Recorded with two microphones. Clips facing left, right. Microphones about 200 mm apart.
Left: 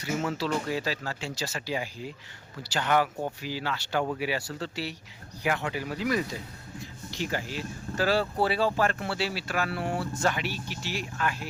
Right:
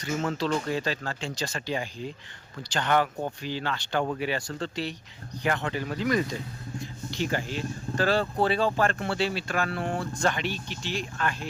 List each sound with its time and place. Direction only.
0.0 s speech: 5° left (ahead or behind)
7.3 s speech: 5° left (ahead or behind)